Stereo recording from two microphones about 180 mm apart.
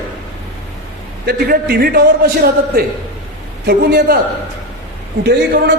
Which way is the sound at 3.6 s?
60° right (ahead or behind).